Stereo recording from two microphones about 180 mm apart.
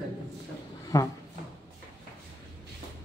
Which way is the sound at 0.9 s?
20° left (ahead or behind).